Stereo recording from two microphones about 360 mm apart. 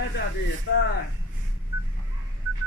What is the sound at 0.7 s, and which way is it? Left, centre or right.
Speech, left.